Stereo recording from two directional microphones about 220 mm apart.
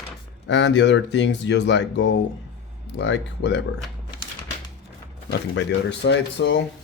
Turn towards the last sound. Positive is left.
turn(degrees=55)  # may be behind; listen again after turning